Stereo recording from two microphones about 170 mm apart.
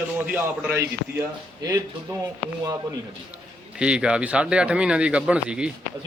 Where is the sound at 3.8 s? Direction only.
5° right (ahead or behind).